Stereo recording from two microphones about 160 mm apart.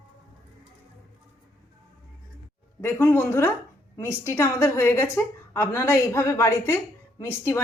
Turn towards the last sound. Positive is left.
turn(degrees=15)  # may be behind; listen again after turning